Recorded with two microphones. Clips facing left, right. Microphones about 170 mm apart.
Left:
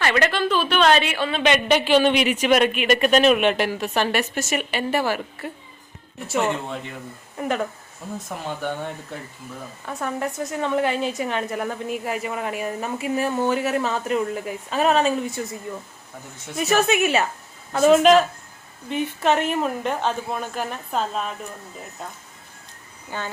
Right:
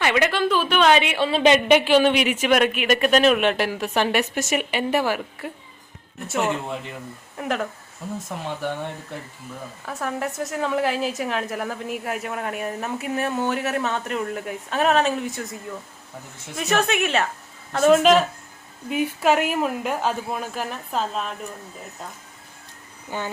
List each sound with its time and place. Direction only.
0.0 s speech: 10° right (ahead or behind); by 1.6 s 30° right (ahead or behind)
1.6 s a woman's voice: 10° right (ahead or behind)
9.8 s a woman's voice: centre (ahead or behind)
16.6 s a woman's voice: 5° left (ahead or behind)
23.1 s speech: 15° right (ahead or behind)